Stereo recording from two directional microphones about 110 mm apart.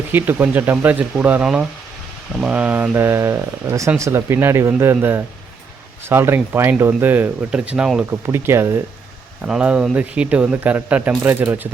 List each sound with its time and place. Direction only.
0.1 s speech: 20° right (ahead or behind)
8.2 s speech: 25° right (ahead or behind)
9.4 s speech: 10° right (ahead or behind)